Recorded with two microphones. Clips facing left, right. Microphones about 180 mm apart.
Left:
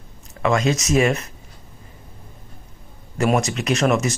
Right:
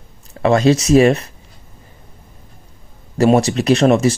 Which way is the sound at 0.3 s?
35° right (ahead or behind).